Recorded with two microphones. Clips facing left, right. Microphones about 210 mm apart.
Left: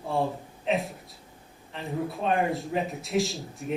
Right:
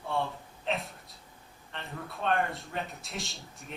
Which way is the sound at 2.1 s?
Centre (ahead or behind).